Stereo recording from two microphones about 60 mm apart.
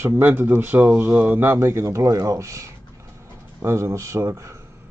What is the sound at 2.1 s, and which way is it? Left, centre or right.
Speech, right.